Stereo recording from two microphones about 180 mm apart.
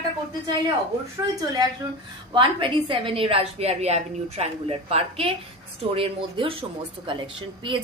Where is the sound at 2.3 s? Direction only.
25° right (ahead or behind).